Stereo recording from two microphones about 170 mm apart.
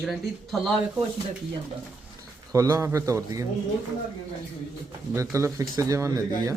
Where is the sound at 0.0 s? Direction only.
Centre (ahead or behind).